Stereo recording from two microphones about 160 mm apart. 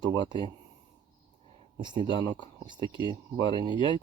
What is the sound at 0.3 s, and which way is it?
Speech, 30° right (ahead or behind).